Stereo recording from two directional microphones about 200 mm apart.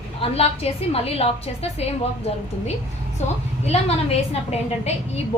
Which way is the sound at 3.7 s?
30° left (ahead or behind).